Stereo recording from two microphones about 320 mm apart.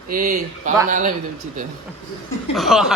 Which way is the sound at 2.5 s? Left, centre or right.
Centre.